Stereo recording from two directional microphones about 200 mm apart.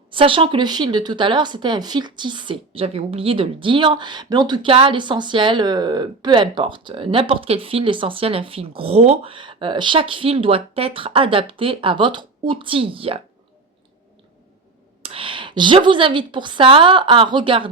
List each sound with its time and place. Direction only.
0.1 s speech: 25° right (ahead or behind)
15.0 s speech: 25° right (ahead or behind)